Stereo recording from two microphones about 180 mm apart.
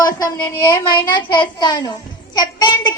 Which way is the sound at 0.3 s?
20° left (ahead or behind).